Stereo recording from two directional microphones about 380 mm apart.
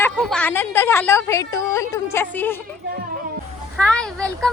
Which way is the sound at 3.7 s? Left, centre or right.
Centre.